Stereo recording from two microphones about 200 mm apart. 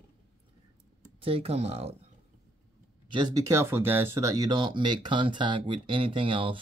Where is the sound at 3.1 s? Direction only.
20° right (ahead or behind).